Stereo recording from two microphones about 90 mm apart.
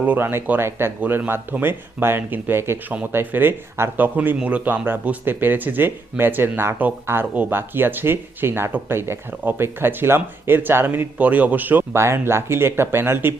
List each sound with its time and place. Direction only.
0.0 s speech: 20° right (ahead or behind)